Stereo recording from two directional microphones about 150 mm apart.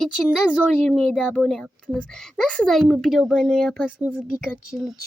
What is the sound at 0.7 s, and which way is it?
Speech, 5° left (ahead or behind).